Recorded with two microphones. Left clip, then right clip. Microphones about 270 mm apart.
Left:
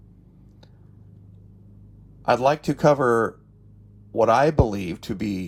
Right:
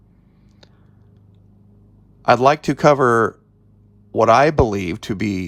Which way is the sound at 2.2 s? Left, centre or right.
Right.